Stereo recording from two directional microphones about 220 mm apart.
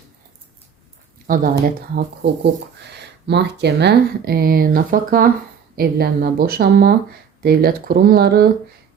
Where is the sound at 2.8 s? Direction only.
50° right (ahead or behind).